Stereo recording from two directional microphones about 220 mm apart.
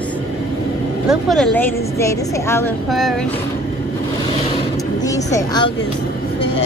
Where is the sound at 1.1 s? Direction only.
Centre (ahead or behind).